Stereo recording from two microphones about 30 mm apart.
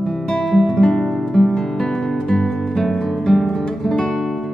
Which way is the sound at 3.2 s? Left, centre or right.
Centre.